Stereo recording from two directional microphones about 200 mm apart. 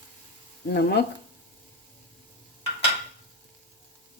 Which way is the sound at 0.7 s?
55° left (ahead or behind).